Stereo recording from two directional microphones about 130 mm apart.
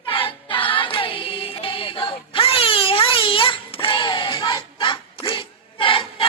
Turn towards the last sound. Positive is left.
turn(degrees=40)  # may be behind; listen again after turning